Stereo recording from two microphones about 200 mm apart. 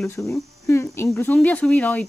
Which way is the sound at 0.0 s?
10° left (ahead or behind).